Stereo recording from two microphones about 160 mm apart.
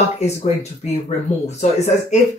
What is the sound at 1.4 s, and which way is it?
Speech, 45° left (ahead or behind).